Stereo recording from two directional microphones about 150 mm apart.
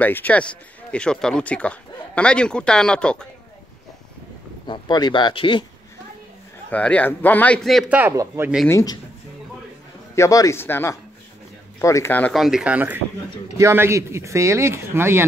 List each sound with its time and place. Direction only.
0.0 s speech: 10° left (ahead or behind)
4.6 s speech: 30° left (ahead or behind)
6.7 s speech: 10° left (ahead or behind)
8.6 s speech: 20° left (ahead or behind)
10.1 s speech: 20° left (ahead or behind)
12.4 s speech: 5° right (ahead or behind)